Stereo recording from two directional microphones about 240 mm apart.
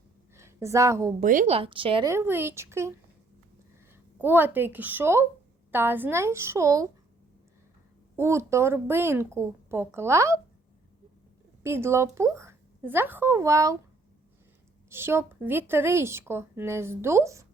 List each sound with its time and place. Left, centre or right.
0.3 s a woman's voice: centre
1.2 s speech: right; by 2.9 s centre
4.2 s speech: centre
8.1 s speech: centre
11.6 s speech: centre
14.8 s speech: centre